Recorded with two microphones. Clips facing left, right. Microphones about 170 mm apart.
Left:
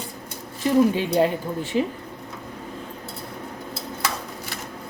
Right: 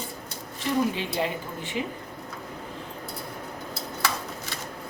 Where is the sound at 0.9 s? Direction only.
40° left (ahead or behind).